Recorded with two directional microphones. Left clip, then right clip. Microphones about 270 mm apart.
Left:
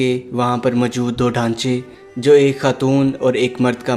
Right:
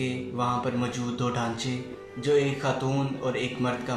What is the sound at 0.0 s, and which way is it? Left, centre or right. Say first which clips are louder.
Speech: left 11 dB; left.